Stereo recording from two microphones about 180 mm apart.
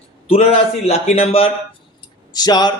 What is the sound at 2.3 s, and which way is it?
Speech, 25° left (ahead or behind).